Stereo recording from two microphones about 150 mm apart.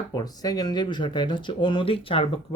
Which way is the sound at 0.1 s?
25° left (ahead or behind).